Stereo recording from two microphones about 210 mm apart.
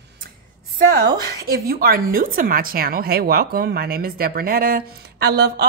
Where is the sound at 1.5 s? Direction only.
45° right (ahead or behind).